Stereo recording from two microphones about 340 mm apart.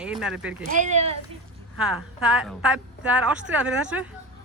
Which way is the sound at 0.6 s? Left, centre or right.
Right.